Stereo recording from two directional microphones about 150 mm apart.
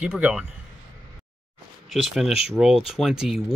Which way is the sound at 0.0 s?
10° right (ahead or behind).